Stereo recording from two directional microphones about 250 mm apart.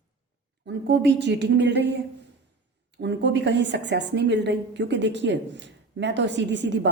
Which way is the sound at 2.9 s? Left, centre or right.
Right.